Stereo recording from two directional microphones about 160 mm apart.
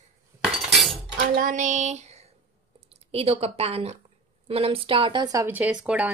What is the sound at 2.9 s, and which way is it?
A woman's voice, 40° right (ahead or behind).